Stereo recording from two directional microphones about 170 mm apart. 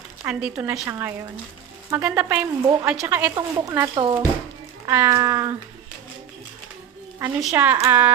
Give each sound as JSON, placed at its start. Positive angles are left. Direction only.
{"t": 0.2, "sound": "speech", "side_deg": -10}
{"t": 7.3, "sound": "speech", "side_deg": -5}